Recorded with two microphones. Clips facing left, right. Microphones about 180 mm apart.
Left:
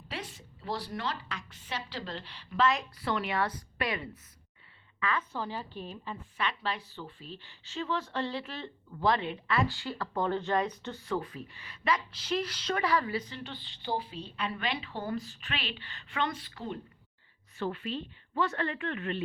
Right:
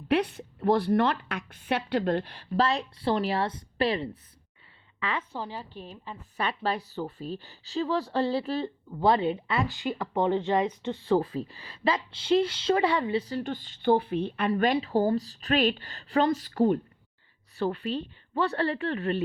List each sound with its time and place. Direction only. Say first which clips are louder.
0.1 s speech: right 16 dB; 60° right (ahead or behind)
2.5 s a woman's voice: right 2 dB; 35° right (ahead or behind)
5.4 s a woman's voice: even; 5° right (ahead or behind)
5.7 s a woman's voice: left 1 dB; 35° right (ahead or behind)
13.2 s a woman's voice: right 11 dB; 45° right (ahead or behind)
17.6 s a woman's voice: right 5 dB; 35° right (ahead or behind)